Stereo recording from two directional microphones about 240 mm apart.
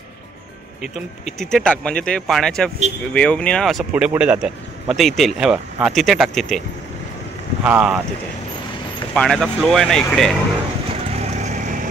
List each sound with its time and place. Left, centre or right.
1.4 s speech: centre
7.6 s speech: centre
9.1 s speech: centre
11.1 s vehicle: right